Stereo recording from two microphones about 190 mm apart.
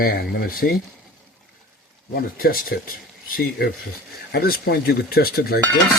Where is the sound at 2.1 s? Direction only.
50° left (ahead or behind).